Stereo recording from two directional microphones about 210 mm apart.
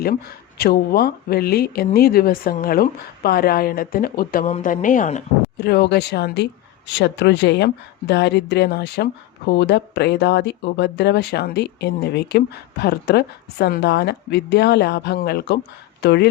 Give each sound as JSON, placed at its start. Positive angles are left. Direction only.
{"t": 0.6, "sound": "speech", "side_deg": 45}
{"t": 5.5, "sound": "speech", "side_deg": 50}